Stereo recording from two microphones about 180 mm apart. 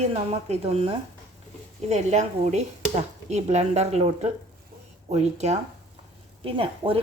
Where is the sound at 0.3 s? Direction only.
35° right (ahead or behind).